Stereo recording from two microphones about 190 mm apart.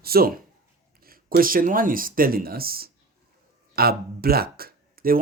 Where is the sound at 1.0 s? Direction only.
50° right (ahead or behind).